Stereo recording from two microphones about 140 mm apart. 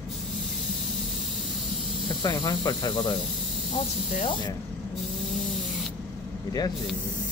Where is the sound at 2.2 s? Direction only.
30° left (ahead or behind).